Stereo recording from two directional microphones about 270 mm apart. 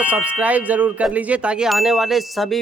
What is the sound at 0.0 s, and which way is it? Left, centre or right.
Speech, centre.